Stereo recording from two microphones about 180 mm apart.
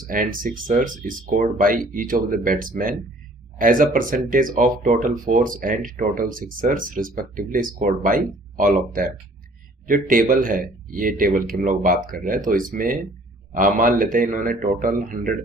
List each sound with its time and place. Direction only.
0.1 s speech: 50° right (ahead or behind)